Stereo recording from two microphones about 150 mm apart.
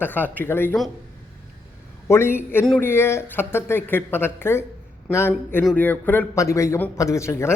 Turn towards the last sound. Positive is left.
turn(degrees=15)  # may be behind; listen again after turning